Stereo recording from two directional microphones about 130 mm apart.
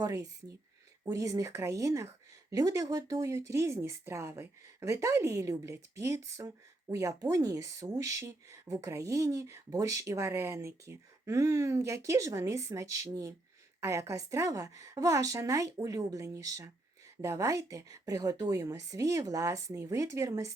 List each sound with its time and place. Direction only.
0.0 s speech: 25° right (ahead or behind)